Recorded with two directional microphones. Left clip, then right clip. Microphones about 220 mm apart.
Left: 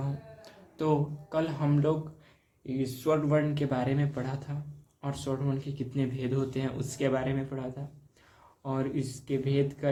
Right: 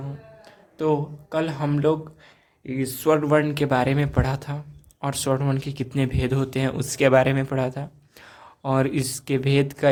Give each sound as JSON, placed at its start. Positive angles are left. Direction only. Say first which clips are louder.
{"t": 0.4, "sound": "a sound", "louder": "right 7 dB", "side_deg": -10}
{"t": 1.3, "sound": "speech", "louder": "right 5 dB", "side_deg": -20}
{"t": 2.8, "sound": "speech", "louder": "right 8 dB", "side_deg": -40}